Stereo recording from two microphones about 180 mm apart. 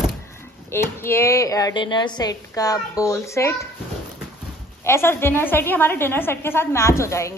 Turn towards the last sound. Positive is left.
turn(degrees=15)  # may be behind; listen again after turning